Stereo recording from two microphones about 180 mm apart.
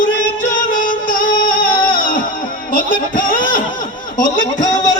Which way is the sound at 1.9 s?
50° left (ahead or behind).